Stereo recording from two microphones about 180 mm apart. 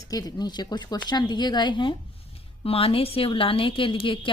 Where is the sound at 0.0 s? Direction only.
20° left (ahead or behind).